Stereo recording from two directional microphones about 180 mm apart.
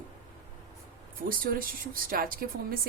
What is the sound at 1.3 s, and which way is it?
A woman's voice, 55° right (ahead or behind).